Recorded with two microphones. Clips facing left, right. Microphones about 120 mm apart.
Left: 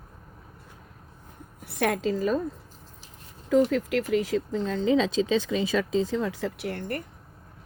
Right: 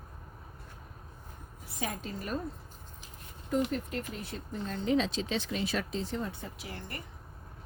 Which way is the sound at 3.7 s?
90° left.